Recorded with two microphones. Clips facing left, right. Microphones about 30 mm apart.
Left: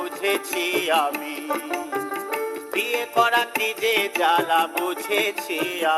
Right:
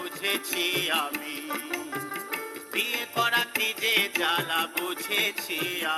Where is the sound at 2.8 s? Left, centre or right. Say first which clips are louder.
Left 6 dB; right.